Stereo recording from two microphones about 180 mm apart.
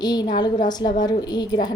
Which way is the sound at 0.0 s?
20° left (ahead or behind).